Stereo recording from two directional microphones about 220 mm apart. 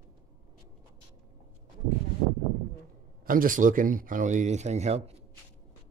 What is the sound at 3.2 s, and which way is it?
Speech, 40° right (ahead or behind).